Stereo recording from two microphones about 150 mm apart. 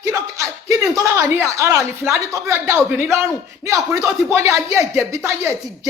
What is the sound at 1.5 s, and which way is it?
A woman's voice, 20° right (ahead or behind).